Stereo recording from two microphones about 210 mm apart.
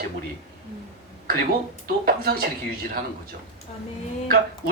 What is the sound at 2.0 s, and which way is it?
Speech, 45° right (ahead or behind).